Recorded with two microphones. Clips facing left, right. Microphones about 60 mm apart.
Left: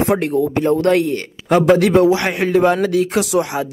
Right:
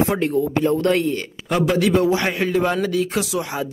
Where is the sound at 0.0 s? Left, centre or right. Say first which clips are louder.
Left 3 dB; left.